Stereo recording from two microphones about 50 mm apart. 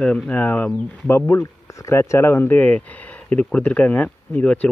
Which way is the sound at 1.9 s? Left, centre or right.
Left.